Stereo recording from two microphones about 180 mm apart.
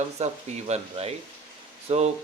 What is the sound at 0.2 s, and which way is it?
Speech, 40° right (ahead or behind).